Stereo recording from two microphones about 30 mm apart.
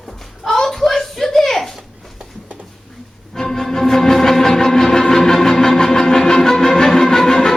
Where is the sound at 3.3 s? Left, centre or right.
Centre.